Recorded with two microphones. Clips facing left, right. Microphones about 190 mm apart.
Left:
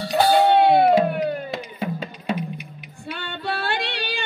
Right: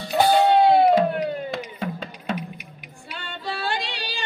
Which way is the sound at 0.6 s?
65° left (ahead or behind).